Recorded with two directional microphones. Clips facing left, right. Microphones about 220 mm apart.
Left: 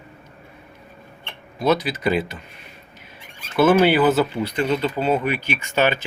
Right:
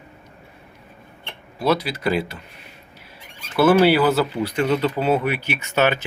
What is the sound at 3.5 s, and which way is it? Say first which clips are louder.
Speech: even; 5° right (ahead or behind).